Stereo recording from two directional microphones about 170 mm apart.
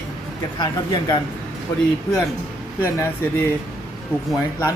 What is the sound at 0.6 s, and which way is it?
Speech, 25° left (ahead or behind).